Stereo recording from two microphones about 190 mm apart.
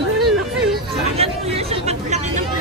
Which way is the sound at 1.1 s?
30° right (ahead or behind).